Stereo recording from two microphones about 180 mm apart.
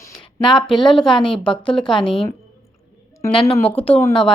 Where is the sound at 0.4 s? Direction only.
Centre (ahead or behind).